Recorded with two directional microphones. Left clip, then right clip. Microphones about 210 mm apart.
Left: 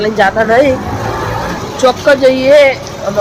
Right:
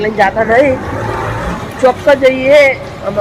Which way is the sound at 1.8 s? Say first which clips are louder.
Even; 15° left (ahead or behind).